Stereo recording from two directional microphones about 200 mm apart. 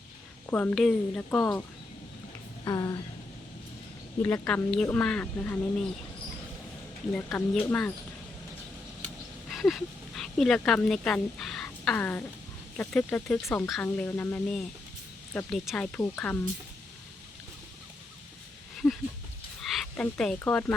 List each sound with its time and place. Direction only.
0.4 s speech: 10° left (ahead or behind)
2.6 s a sound: 20° left (ahead or behind)
4.2 s speech: 5° left (ahead or behind)
7.1 s speech: 5° left (ahead or behind)
9.5 s speech: centre (ahead or behind)
19.7 s speech: 5° left (ahead or behind)